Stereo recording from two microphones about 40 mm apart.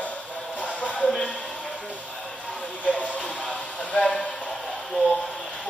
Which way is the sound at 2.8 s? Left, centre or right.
Left.